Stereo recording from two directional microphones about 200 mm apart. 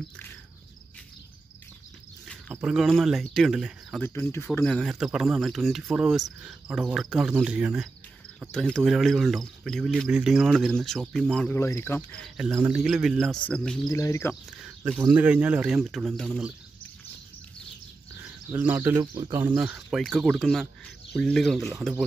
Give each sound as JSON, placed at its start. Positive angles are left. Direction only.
{"t": 2.5, "sound": "speech", "side_deg": 0}
{"t": 4.0, "sound": "speech", "side_deg": 10}
{"t": 12.4, "sound": "speech", "side_deg": -10}
{"t": 13.8, "sound": "speech", "side_deg": 15}
{"t": 14.8, "sound": "speech", "side_deg": -5}
{"t": 18.5, "sound": "speech", "side_deg": -10}
{"t": 19.1, "sound": "speech", "side_deg": -20}
{"t": 19.7, "sound": "speech", "side_deg": 0}